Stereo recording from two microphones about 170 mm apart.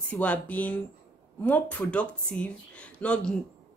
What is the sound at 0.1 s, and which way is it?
Speech, 10° left (ahead or behind).